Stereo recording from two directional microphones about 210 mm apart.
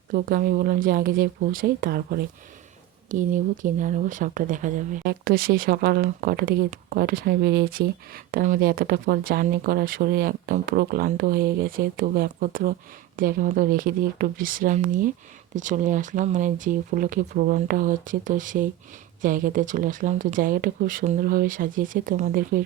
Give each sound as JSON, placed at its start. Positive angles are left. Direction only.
{"t": 0.1, "sound": "speech", "side_deg": -40}